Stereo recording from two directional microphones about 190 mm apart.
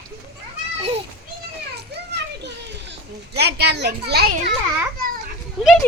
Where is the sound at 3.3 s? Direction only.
55° right (ahead or behind).